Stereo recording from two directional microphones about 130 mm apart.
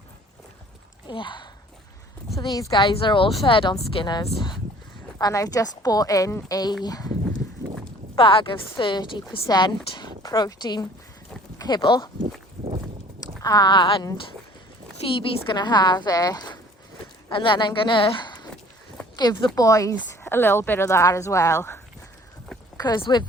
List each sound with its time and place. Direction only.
1.0 s a woman's voice: 40° left (ahead or behind)
2.8 s a woman's voice: 40° left (ahead or behind)
8.1 s a woman's voice: 40° left (ahead or behind)
13.4 s a woman's voice: 30° left (ahead or behind)
22.8 s a woman's voice: 35° left (ahead or behind)